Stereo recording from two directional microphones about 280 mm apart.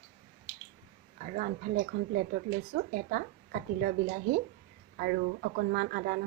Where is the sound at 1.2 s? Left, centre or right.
Right.